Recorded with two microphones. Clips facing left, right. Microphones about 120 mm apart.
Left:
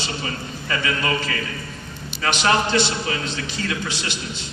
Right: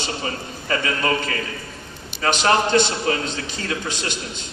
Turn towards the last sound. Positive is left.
turn(degrees=-45)  # may be behind; listen again after turning